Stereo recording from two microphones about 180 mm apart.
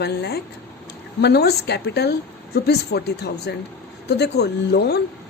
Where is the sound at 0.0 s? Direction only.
65° left (ahead or behind).